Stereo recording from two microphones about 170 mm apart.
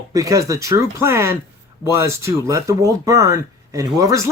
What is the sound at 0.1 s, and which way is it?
A man's voice, 20° right (ahead or behind).